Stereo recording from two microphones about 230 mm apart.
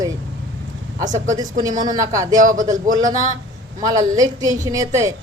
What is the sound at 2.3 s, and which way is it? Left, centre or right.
Speech, right.